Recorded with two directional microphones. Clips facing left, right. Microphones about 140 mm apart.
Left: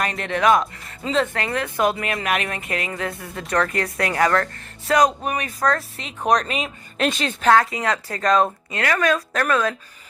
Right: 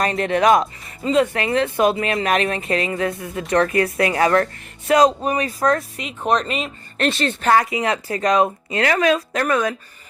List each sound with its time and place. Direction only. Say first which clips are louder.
0.0 s speech: right 3 dB; 35° right (ahead or behind)
1.0 s speech: right 4 dB; 5° right (ahead or behind)
1.3 s speech: right 5 dB; 20° right (ahead or behind)
6.0 s speech: even; 5° right (ahead or behind)
7.5 s speech: right 1 dB; 15° right (ahead or behind)
8.7 s speech: right 4 dB; 25° right (ahead or behind)
9.3 s speech: right 1 dB; 10° right (ahead or behind)